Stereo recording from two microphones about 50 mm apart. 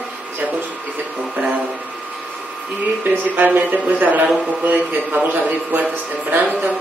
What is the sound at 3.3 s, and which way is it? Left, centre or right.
A woman's voice, right.